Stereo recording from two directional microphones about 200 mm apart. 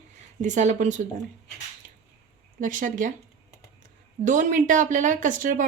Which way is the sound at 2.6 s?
40° right (ahead or behind).